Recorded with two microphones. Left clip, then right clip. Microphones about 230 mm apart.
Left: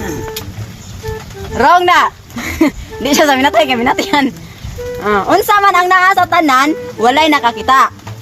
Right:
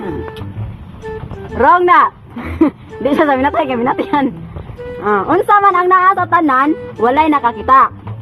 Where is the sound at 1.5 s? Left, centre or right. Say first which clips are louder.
Even; left.